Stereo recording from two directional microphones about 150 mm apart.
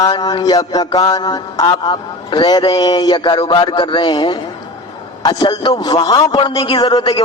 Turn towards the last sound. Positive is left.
turn(degrees=30)  # may be behind; listen again after turning